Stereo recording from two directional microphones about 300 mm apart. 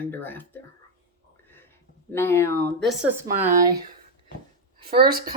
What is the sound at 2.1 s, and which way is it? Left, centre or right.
Speech, centre.